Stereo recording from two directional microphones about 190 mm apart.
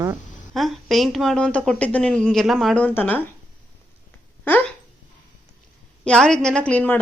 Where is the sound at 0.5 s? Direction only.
Centre (ahead or behind).